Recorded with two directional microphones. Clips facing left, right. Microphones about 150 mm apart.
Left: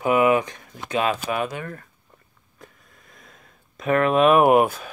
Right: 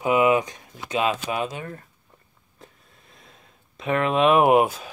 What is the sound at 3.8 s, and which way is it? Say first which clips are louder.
Speech: left 3 dB; 45° left (ahead or behind).